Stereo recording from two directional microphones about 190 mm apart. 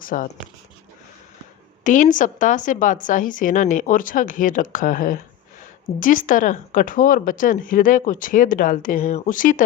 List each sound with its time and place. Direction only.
0.0 s speech: 45° left (ahead or behind)
1.8 s speech: 45° left (ahead or behind)